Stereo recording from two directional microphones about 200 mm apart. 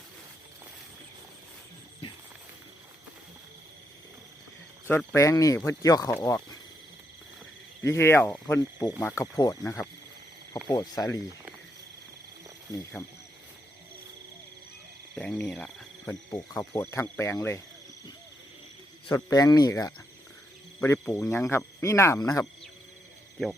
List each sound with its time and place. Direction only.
4.9 s speech: 15° left (ahead or behind)
6.1 s speech: 5° left (ahead or behind)
7.9 s speech: 15° left (ahead or behind)
15.1 s speech: 5° left (ahead or behind)
19.1 s speech: 20° left (ahead or behind)